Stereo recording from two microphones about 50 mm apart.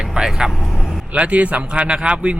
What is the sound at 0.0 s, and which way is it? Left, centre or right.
Vehicle, centre.